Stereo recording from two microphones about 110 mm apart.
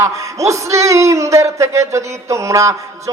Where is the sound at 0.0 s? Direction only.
30° right (ahead or behind).